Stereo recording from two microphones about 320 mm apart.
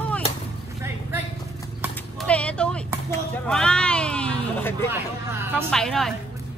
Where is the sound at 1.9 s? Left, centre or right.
Centre.